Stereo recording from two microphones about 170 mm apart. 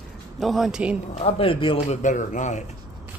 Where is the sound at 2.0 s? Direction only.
45° left (ahead or behind).